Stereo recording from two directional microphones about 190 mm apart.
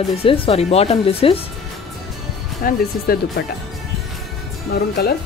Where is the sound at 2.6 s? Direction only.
55° left (ahead or behind).